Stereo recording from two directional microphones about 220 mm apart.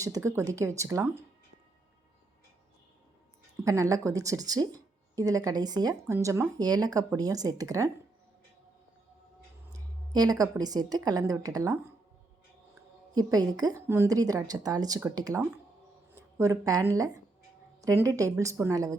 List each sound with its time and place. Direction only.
0.0 s speech: 15° right (ahead or behind)
3.6 s speech: 15° right (ahead or behind)
9.7 s a woman's voice: 15° right (ahead or behind)
13.1 s speech: 15° right (ahead or behind)